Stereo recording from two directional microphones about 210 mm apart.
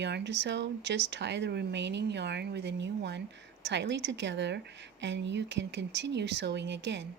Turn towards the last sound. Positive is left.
turn(degrees=-55)  # may be behind; listen again after turning